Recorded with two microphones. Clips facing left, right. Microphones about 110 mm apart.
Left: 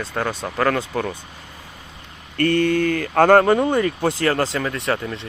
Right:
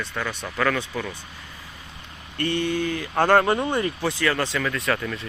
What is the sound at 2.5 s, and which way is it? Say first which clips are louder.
Speech: left 6 dB; 50° left (ahead or behind).